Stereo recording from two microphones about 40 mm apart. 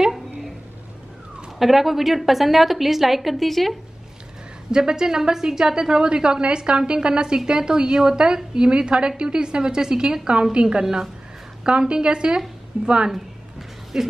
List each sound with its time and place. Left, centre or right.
1.6 s a woman's voice: centre
4.6 s a woman's voice: centre
13.1 s a sound: centre